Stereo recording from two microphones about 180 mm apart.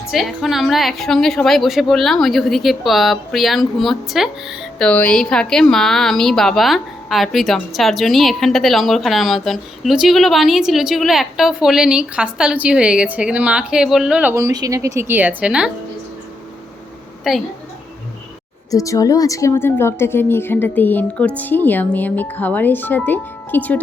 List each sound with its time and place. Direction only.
0.1 s a woman's voice: centre (ahead or behind)
17.3 s a woman's voice: centre (ahead or behind)
18.7 s a woman's voice: 20° left (ahead or behind)